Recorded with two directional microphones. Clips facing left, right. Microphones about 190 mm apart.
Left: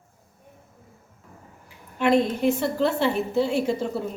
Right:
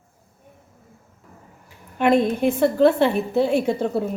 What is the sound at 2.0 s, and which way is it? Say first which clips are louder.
A woman's voice: right 3 dB; 55° right (ahead or behind).